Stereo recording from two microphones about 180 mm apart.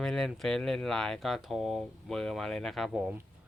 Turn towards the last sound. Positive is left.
turn(degrees=-5)  # may be behind; listen again after turning